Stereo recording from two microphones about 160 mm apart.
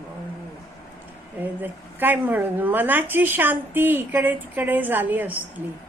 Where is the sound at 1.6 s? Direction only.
10° right (ahead or behind).